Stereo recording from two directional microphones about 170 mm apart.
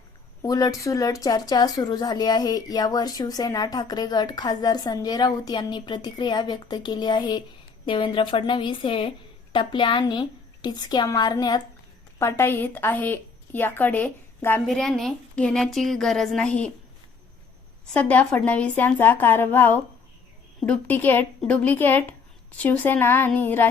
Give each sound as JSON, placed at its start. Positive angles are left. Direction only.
{"t": 0.4, "sound": "a woman's voice", "side_deg": 20}
{"t": 12.2, "sound": "a woman's voice", "side_deg": 15}
{"t": 17.9, "sound": "a woman's voice", "side_deg": 10}